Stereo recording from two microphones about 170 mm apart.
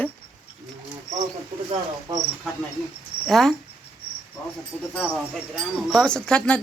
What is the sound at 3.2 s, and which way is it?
Speech, centre (ahead or behind).